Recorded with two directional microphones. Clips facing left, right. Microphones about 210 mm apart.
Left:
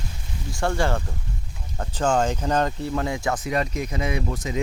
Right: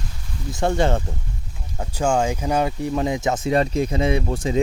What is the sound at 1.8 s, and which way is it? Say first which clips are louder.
Speech: right 1 dB; 10° right (ahead or behind).